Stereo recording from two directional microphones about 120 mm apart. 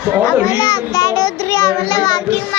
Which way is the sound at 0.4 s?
30° left (ahead or behind).